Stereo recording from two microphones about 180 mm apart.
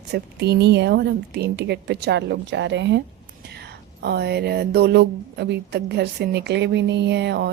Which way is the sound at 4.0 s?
65° right (ahead or behind).